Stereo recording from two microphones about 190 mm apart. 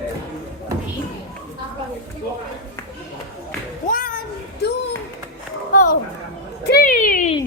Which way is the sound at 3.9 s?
50° left (ahead or behind).